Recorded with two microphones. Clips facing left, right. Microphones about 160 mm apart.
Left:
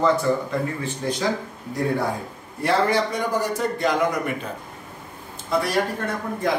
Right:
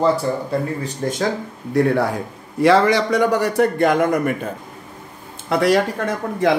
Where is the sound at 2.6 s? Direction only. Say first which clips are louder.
Right 6 dB; 90° right; by 4.2 s 55° right (ahead or behind).